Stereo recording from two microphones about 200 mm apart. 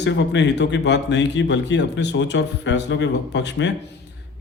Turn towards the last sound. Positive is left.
turn(degrees=60)  # may be behind; listen again after turning